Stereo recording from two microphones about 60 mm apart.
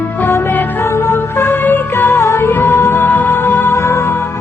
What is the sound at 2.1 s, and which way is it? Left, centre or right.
Music, left.